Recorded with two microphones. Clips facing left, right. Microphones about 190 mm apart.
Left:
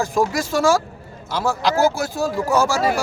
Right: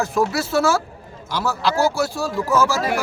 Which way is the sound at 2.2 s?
40° left (ahead or behind).